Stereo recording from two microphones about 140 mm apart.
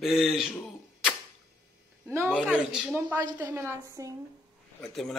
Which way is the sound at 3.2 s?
15° right (ahead or behind).